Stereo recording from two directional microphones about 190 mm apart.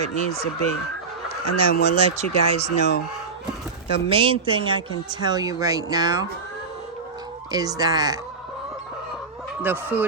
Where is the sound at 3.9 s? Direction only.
25° right (ahead or behind).